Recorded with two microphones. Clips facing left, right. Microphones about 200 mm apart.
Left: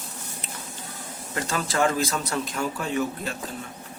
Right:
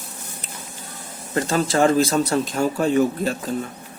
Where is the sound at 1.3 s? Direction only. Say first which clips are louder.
Right 6 dB; 30° right (ahead or behind).